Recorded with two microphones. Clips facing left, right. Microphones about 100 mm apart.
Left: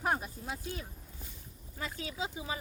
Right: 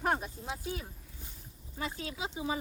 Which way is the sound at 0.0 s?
Centre (ahead or behind).